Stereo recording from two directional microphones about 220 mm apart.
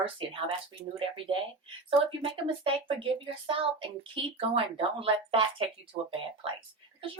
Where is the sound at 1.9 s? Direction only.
25° right (ahead or behind).